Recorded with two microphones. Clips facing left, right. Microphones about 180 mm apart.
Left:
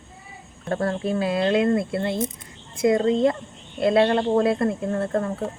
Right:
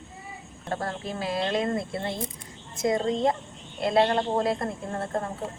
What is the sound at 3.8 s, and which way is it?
Speech, 75° left (ahead or behind).